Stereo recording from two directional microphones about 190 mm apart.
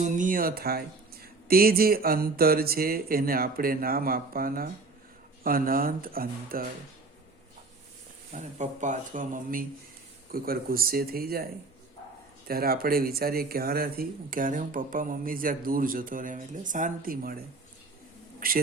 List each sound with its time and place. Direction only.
0.0 s speech: 45° right (ahead or behind)
8.3 s speech: 40° right (ahead or behind)
12.5 s speech: 50° right (ahead or behind)